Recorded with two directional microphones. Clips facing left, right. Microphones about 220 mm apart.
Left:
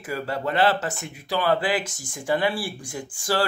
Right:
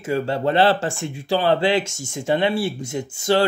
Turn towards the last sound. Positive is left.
turn(degrees=-25)  # may be behind; listen again after turning